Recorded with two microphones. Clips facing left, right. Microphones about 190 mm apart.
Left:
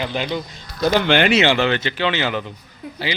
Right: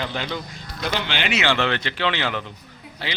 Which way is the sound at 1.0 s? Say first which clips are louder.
Left 12 dB; 50° left (ahead or behind).